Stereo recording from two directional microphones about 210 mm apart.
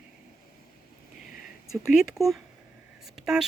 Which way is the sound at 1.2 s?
40° left (ahead or behind).